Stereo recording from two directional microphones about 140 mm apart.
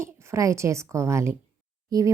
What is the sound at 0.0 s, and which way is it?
A woman's voice, 20° right (ahead or behind).